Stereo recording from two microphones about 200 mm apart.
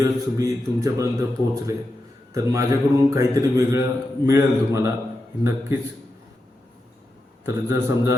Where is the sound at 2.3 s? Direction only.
15° right (ahead or behind).